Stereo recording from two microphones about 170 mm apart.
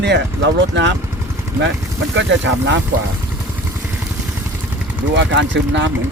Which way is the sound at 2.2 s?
90° right.